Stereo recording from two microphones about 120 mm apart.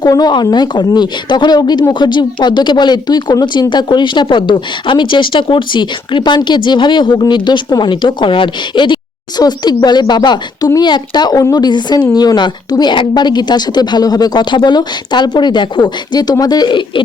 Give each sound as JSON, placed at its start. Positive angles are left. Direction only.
{"t": 0.0, "sound": "speech", "side_deg": 35}